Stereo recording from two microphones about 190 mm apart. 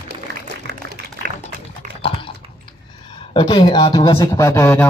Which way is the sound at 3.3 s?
25° left (ahead or behind).